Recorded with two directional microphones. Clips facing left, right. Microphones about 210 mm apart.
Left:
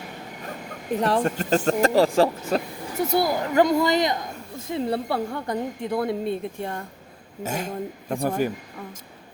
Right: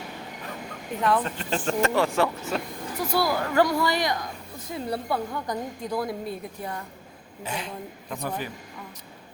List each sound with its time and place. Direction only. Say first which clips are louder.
0.9 s speech: left 3 dB; 40° left (ahead or behind)
3.0 s a woman's voice: left 3 dB; 20° left (ahead or behind)
7.4 s speech: left 5 dB; 45° left (ahead or behind)